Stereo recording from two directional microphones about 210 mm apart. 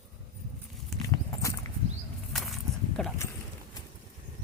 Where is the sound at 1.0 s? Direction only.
15° left (ahead or behind).